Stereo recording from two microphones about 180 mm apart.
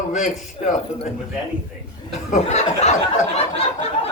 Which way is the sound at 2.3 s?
40° left (ahead or behind).